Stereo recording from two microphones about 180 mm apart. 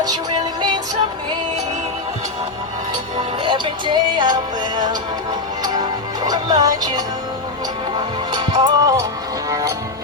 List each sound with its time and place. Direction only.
3.2 s music: 25° right (ahead or behind)
6.2 s music: 20° right (ahead or behind)